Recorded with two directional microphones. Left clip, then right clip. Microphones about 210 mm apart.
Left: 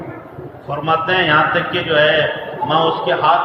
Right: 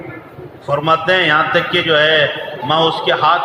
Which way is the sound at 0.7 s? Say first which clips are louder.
Right 3 dB; 55° right (ahead or behind).